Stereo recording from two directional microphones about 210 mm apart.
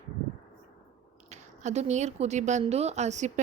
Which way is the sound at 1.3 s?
35° right (ahead or behind).